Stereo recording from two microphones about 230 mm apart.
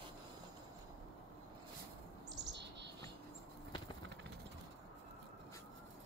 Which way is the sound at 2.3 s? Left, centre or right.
Right.